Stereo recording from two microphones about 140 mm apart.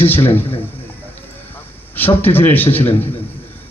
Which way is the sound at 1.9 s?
15° left (ahead or behind).